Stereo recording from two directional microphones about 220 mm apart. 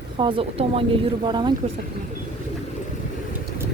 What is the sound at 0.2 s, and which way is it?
Speech, 25° right (ahead or behind).